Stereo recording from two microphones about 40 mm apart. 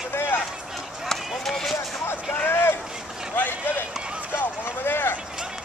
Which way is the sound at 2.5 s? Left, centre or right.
Left.